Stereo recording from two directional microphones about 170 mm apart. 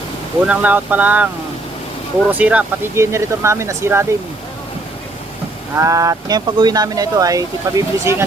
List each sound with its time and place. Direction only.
0.4 s speech: 10° right (ahead or behind)
2.3 s speech: 10° right (ahead or behind)
5.7 s speech: 20° right (ahead or behind)